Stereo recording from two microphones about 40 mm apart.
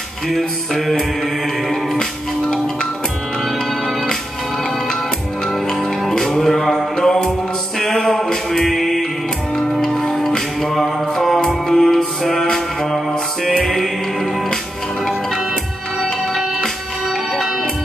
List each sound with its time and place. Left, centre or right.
0.3 s music: centre
2.5 s music: centre
5.7 s music: centre
7.1 s music: centre
12.2 s mantra: centre
13.5 s music: centre